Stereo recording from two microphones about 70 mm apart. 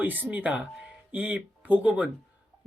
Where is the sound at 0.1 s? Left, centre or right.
Right.